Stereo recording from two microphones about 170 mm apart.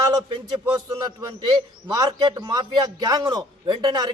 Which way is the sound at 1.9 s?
20° right (ahead or behind).